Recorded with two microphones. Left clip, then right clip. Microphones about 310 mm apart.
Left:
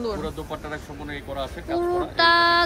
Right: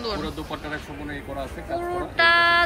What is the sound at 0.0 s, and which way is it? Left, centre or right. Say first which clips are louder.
Speech: even; centre.